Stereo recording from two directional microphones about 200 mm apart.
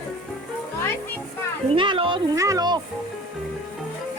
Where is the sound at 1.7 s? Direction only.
25° right (ahead or behind).